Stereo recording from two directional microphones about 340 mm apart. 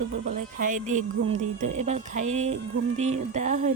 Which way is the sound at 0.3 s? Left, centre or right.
Right.